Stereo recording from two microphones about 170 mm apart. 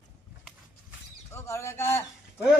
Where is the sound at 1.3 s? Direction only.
15° left (ahead or behind).